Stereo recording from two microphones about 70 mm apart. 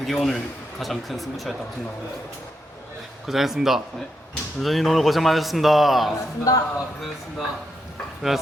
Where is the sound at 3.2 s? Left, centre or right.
Centre.